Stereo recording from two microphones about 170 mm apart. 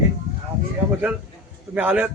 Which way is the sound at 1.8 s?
10° right (ahead or behind).